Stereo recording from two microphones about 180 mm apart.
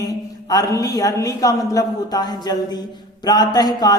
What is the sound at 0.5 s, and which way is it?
A man's voice, 20° left (ahead or behind).